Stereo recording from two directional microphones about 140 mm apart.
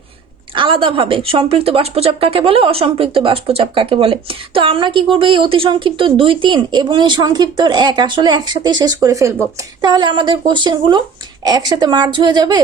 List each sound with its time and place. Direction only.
0.5 s speech: 40° right (ahead or behind)